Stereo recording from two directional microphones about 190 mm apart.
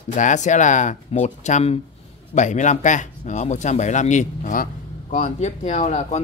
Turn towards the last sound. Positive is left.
turn(degrees=35)  # may be behind; listen again after turning